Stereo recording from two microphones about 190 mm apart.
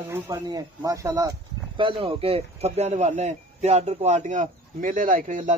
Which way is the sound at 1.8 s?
30° right (ahead or behind).